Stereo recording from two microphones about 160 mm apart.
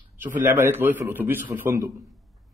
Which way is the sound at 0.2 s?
10° right (ahead or behind).